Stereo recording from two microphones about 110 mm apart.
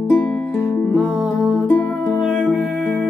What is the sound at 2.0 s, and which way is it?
Music, 5° left (ahead or behind).